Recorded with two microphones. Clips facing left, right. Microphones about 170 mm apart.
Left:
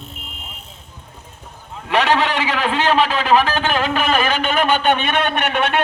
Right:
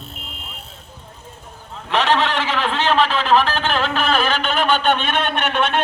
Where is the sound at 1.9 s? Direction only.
10° left (ahead or behind).